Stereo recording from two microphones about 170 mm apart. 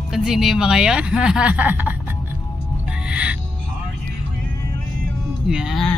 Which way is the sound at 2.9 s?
5° right (ahead or behind).